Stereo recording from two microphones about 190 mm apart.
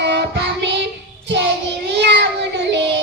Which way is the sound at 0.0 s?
65° right (ahead or behind).